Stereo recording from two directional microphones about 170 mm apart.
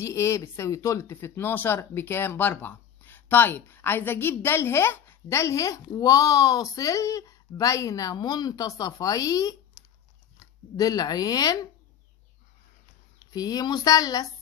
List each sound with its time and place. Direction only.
0.0 s speech: 15° left (ahead or behind)
10.8 s speech: 20° left (ahead or behind)
13.3 s speech: 20° left (ahead or behind)